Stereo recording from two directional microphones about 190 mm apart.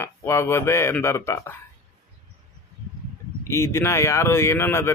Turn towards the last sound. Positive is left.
turn(degrees=15)  # may be behind; listen again after turning